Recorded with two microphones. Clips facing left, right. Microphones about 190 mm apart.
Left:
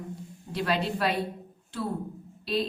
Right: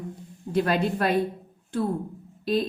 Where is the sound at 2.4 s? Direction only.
45° right (ahead or behind).